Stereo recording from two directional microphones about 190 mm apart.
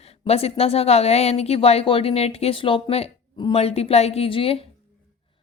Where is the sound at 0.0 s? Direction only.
30° left (ahead or behind).